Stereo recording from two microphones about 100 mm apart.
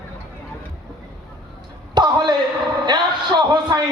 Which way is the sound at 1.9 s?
45° right (ahead or behind).